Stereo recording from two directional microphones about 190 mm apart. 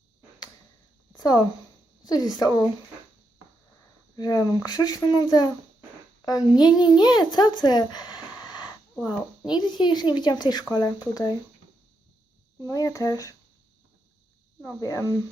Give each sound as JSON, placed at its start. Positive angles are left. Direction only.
{"t": 1.1, "sound": "a sound", "side_deg": 20}
{"t": 2.0, "sound": "speech", "side_deg": 20}
{"t": 4.1, "sound": "a woman's voice", "side_deg": 20}
{"t": 9.0, "sound": "a child's voice", "side_deg": -5}
{"t": 9.6, "sound": "speech", "side_deg": 25}
{"t": 12.6, "sound": "speech", "side_deg": 15}
{"t": 14.8, "sound": "speech", "side_deg": 20}